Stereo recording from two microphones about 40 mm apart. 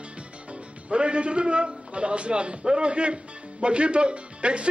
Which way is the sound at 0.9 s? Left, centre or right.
Right.